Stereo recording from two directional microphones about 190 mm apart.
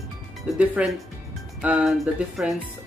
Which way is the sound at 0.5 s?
5° right (ahead or behind).